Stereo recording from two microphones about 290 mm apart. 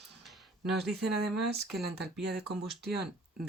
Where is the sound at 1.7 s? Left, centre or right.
Centre.